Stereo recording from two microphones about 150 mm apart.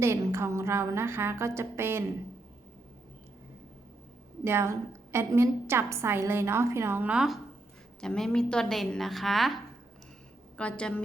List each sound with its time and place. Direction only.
0.0 s a woman's voice: 20° right (ahead or behind)
4.4 s a woman's voice: 15° right (ahead or behind); by 9.6 s centre (ahead or behind)
10.6 s a woman's voice: 5° left (ahead or behind)